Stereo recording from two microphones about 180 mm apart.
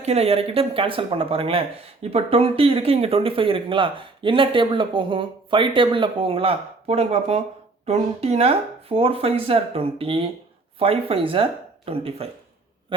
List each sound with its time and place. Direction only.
0.0 s speech: 35° right (ahead or behind)